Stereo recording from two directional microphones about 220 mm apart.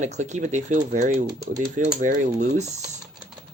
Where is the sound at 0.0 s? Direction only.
30° right (ahead or behind).